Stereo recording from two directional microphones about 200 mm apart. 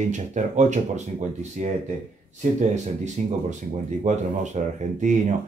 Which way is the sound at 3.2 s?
35° right (ahead or behind).